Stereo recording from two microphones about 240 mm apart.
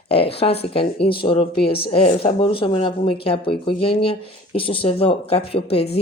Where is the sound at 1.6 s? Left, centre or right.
Left.